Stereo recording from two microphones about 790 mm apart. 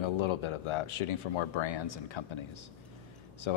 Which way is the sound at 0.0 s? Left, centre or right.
Left.